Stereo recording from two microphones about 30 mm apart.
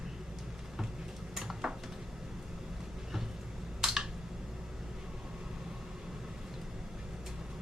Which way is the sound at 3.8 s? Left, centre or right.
Centre.